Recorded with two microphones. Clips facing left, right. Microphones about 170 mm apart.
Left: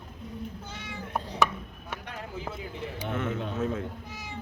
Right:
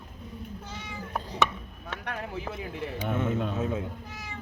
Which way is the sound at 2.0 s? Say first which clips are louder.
Right 6 dB; 65° right (ahead or behind).